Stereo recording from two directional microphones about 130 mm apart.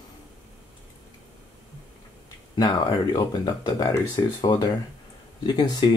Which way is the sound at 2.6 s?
35° left (ahead or behind).